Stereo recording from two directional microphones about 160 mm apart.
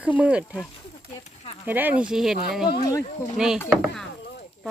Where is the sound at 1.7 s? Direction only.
10° right (ahead or behind).